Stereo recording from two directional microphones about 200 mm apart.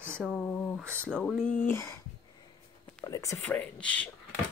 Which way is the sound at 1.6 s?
15° left (ahead or behind).